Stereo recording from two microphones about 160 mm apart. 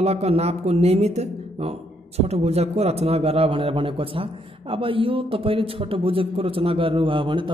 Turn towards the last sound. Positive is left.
turn(degrees=-30)  # may be behind; listen again after turning